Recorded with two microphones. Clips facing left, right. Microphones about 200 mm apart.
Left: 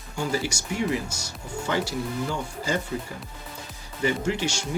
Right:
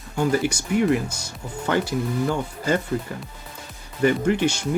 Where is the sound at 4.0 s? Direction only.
55° right (ahead or behind).